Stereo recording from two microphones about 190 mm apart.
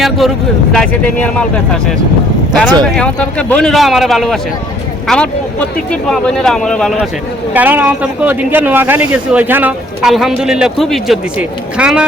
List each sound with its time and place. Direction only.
0.7 s speech: 5° left (ahead or behind)
2.6 s speech: 5° left (ahead or behind)
7.5 s speech: 10° right (ahead or behind)